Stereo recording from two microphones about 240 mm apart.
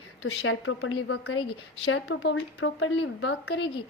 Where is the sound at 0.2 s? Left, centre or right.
Left.